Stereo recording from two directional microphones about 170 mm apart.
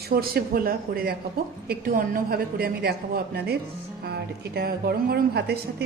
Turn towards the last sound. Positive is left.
turn(degrees=-75)  # may be behind; listen again after turning